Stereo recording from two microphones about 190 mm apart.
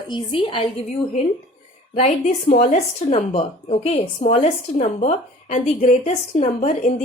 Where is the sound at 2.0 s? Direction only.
40° left (ahead or behind).